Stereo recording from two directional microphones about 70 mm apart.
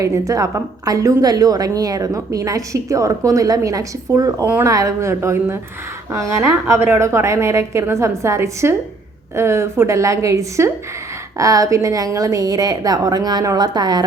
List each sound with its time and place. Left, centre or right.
0.0 s a woman's voice: right
1.2 s a woman's voice: right